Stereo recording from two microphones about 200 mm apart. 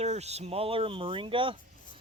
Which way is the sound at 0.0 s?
35° right (ahead or behind).